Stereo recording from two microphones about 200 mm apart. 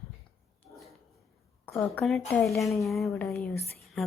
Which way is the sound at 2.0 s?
Centre (ahead or behind).